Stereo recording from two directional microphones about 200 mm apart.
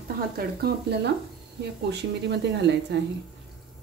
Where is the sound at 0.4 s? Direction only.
50° right (ahead or behind).